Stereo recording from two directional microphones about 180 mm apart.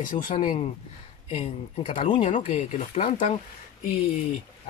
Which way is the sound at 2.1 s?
40° left (ahead or behind).